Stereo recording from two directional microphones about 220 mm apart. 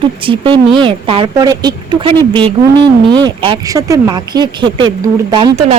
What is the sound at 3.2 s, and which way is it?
Speech, 20° right (ahead or behind).